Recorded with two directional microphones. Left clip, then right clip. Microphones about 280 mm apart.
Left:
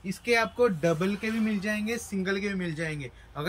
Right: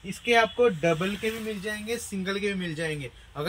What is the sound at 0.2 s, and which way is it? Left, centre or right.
A man's voice, centre.